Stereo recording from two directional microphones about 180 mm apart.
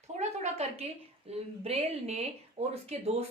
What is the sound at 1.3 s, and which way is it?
Speech, 35° right (ahead or behind).